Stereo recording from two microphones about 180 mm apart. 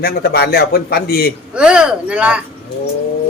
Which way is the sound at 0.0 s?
60° left (ahead or behind).